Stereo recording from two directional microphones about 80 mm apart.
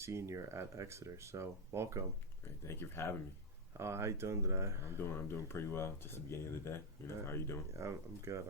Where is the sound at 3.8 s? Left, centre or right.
Right.